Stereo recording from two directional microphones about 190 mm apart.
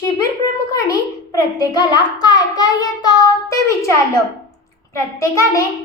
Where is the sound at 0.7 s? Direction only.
15° left (ahead or behind).